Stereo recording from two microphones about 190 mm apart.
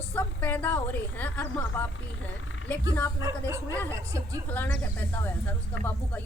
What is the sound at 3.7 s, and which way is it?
A woman's voice, 10° left (ahead or behind).